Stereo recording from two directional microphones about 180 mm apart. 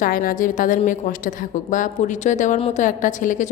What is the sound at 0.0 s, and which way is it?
A woman's voice, 50° left (ahead or behind).